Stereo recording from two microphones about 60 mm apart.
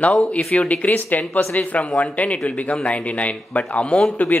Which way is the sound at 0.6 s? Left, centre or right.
Left.